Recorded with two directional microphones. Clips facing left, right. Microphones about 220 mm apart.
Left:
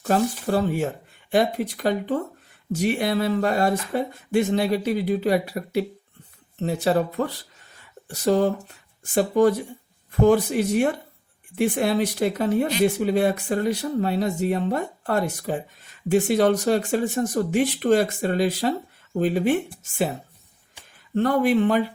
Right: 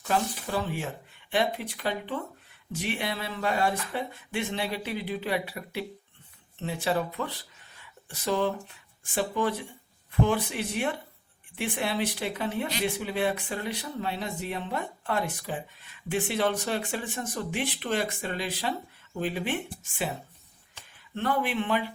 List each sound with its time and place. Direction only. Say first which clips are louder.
0.0 s speech: left 7 dB; 45° left (ahead or behind)
21.2 s speech: left 9 dB; 45° left (ahead or behind)